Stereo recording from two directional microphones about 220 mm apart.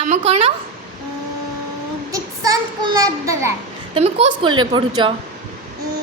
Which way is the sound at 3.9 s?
30° right (ahead or behind).